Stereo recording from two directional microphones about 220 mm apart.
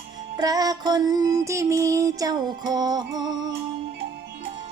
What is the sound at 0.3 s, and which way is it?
Music, 15° right (ahead or behind).